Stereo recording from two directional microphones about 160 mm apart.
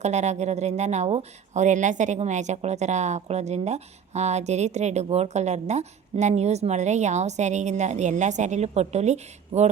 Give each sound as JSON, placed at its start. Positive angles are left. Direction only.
{"t": 0.0, "sound": "speech", "side_deg": -45}